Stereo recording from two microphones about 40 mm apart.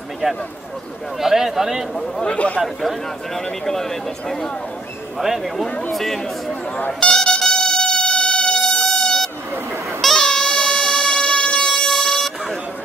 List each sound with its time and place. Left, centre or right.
1.2 s a man's voice: centre
2.2 s speech: left
2.6 s speech: centre
3.3 s speech: centre
5.2 s a man's voice: centre
5.9 s speech: centre
6.9 s a sound: centre
10.1 s music: centre